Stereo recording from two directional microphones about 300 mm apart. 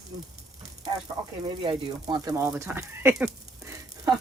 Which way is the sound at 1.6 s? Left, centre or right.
Centre.